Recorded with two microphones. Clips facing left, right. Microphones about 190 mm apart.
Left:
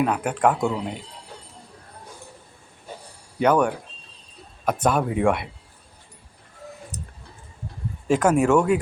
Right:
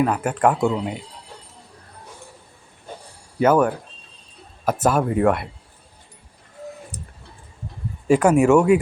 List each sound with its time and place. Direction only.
0.0 s speech: centre (ahead or behind)
3.3 s speech: 5° right (ahead or behind)
6.9 s music: 10° right (ahead or behind)
8.0 s speech: 10° right (ahead or behind)